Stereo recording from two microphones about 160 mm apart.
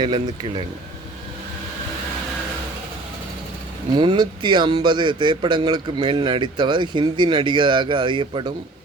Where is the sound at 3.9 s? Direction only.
30° right (ahead or behind).